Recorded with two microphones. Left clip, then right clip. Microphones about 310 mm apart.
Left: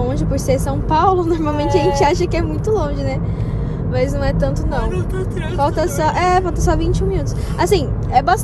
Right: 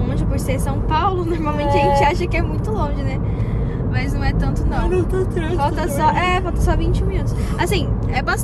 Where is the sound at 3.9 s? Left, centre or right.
Centre.